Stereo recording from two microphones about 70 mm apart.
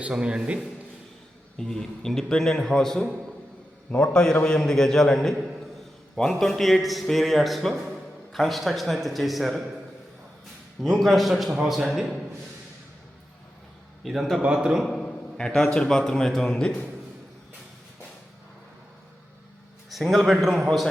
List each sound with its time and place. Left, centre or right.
0.0 s a man's voice: centre
1.5 s a man's voice: centre
10.8 s a man's voice: centre
14.0 s a man's voice: centre
14.4 s a man's voice: centre
14.8 s a man's voice: centre
19.9 s a man's voice: centre